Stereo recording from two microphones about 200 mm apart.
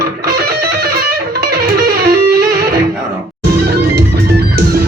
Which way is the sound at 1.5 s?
50° right (ahead or behind).